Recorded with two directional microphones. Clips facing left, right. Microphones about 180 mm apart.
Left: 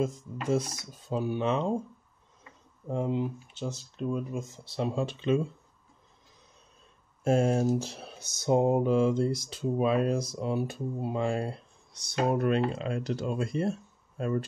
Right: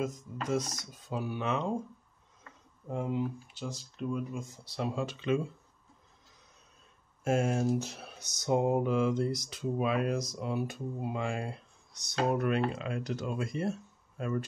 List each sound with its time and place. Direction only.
0.5 s speech: 30° left (ahead or behind)
2.9 s speech: 25° left (ahead or behind)
7.2 s speech: 35° left (ahead or behind)